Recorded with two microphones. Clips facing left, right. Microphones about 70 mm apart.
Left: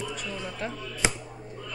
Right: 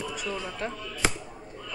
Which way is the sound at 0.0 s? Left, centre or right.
Right.